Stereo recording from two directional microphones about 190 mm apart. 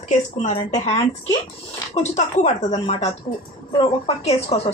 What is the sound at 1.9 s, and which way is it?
A woman's voice, 35° left (ahead or behind).